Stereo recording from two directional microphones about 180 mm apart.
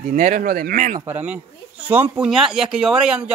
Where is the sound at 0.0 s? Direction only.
45° right (ahead or behind).